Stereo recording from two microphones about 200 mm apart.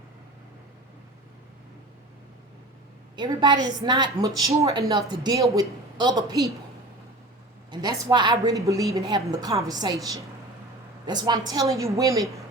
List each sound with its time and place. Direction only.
3.2 s speech: 20° right (ahead or behind)
7.7 s speech: 20° right (ahead or behind)
11.0 s a woman's voice: 20° right (ahead or behind)